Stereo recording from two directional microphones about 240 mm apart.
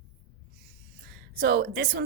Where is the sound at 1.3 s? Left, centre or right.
Right.